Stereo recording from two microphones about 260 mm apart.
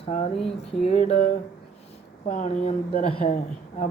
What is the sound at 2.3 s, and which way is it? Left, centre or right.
Speech, left.